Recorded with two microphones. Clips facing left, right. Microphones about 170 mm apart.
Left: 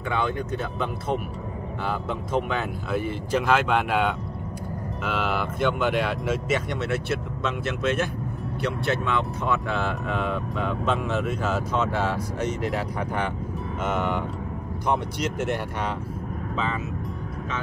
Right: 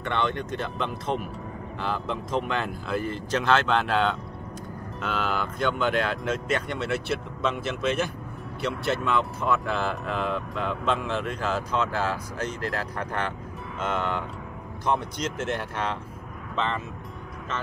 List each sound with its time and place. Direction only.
0.1 s speech: 5° left (ahead or behind)